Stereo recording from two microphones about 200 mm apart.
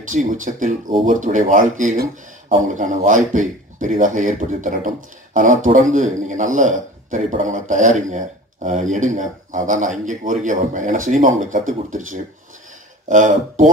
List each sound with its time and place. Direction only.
0.0 s a man's voice: 40° right (ahead or behind)